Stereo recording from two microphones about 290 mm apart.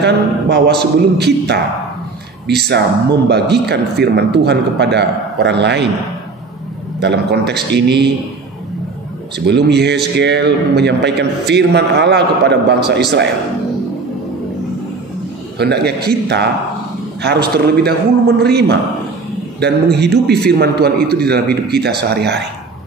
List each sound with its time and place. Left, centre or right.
0.0 s a man's voice: right
7.0 s a man's voice: right
9.5 s a man's voice: right
15.5 s a man's voice: right